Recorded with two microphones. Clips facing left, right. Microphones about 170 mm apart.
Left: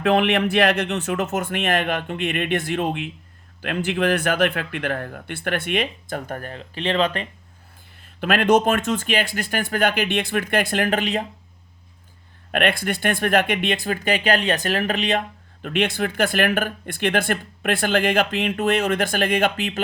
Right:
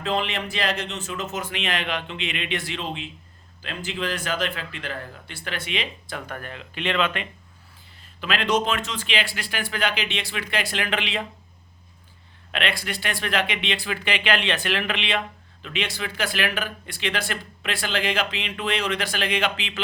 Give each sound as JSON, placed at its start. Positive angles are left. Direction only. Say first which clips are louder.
{"t": 0.0, "sound": "speech", "louder": "left 8 dB", "side_deg": 60}
{"t": 8.2, "sound": "speech", "louder": "left 6 dB", "side_deg": 50}
{"t": 12.5, "sound": "speech", "louder": "left 7 dB", "side_deg": 50}